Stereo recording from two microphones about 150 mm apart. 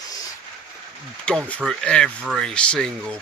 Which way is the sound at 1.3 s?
10° left (ahead or behind).